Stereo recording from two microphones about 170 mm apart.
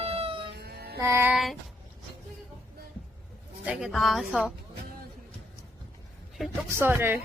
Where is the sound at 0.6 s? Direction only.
70° right (ahead or behind).